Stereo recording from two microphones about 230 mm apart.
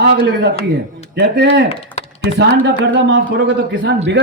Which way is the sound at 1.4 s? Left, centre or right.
Right.